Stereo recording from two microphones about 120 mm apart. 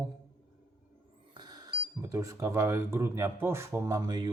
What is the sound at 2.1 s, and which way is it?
A man's voice, 25° right (ahead or behind).